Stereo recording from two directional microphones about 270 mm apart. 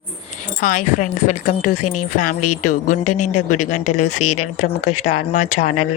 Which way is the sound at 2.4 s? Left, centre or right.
Left.